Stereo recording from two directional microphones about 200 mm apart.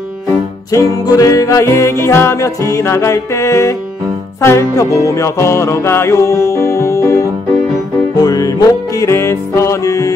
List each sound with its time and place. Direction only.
0.7 s music: 15° left (ahead or behind)